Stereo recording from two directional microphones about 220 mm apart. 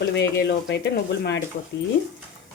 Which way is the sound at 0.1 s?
50° left (ahead or behind).